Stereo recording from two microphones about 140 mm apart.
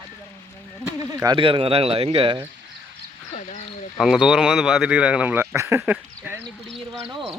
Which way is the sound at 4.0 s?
5° right (ahead or behind).